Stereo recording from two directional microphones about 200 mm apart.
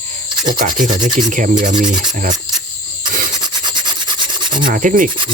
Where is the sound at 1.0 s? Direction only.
40° right (ahead or behind).